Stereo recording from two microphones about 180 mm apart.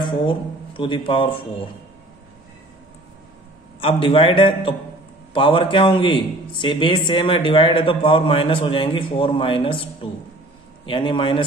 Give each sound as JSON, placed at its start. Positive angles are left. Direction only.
{"t": 0.0, "sound": "a man's voice", "side_deg": 25}
{"t": 3.8, "sound": "a man's voice", "side_deg": 30}
{"t": 10.9, "sound": "a man's voice", "side_deg": 30}